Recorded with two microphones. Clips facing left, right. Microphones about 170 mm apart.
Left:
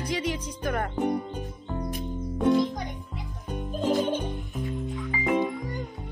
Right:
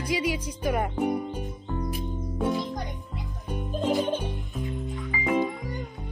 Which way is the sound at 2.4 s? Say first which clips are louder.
Left 5 dB; centre (ahead or behind).